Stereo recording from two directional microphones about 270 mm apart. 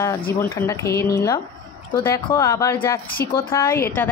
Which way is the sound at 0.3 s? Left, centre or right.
Centre.